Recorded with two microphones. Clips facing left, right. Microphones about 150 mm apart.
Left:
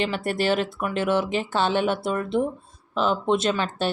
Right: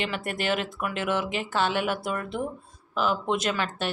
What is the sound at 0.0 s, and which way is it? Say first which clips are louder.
Speech: left 5 dB; 35° left (ahead or behind).